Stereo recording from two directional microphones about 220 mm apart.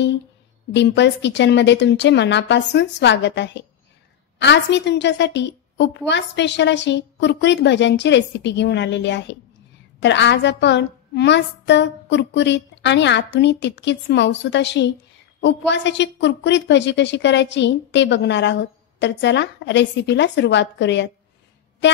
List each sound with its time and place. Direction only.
0.7 s a woman's voice: 50° left (ahead or behind)